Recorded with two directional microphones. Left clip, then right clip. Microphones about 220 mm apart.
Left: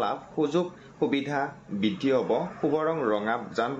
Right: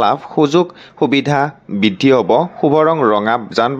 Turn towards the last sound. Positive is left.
turn(degrees=-40)  # may be behind; listen again after turning